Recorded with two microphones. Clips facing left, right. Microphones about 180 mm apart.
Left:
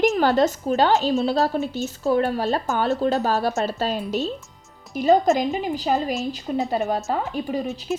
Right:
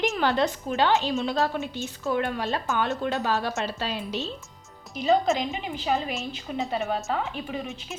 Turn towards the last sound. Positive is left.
turn(degrees=40)  # may be behind; listen again after turning